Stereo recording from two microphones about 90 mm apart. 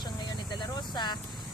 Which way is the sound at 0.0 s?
55° left (ahead or behind).